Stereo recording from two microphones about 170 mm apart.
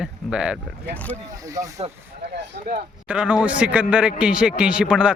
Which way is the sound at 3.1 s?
5° right (ahead or behind).